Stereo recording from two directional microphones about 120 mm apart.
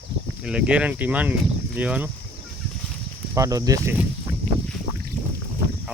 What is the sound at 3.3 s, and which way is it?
Speech, 30° right (ahead or behind).